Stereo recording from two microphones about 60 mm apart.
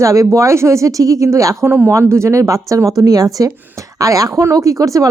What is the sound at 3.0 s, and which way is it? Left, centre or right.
Speech, right.